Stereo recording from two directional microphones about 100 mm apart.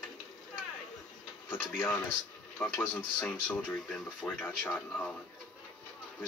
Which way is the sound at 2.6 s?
25° left (ahead or behind).